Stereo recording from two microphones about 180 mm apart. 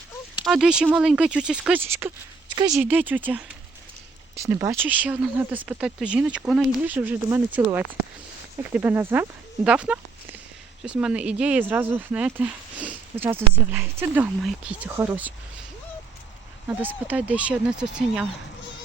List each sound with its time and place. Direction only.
0.4 s speech: centre (ahead or behind)
9.6 s a sound: 5° right (ahead or behind)
10.8 s speech: 5° right (ahead or behind)
16.6 s speech: 10° right (ahead or behind)